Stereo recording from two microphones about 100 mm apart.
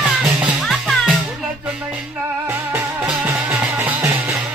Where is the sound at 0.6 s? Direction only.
Centre (ahead or behind).